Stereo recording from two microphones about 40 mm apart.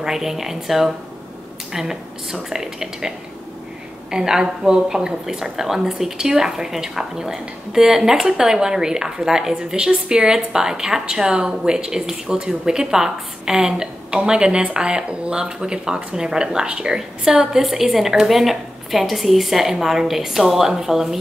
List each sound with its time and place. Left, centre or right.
0.0 s speech: centre